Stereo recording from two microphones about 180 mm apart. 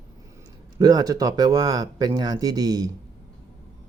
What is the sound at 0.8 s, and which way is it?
Speech, 20° right (ahead or behind).